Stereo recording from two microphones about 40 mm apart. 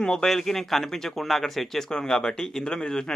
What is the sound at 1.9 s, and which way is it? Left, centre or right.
Speech, centre.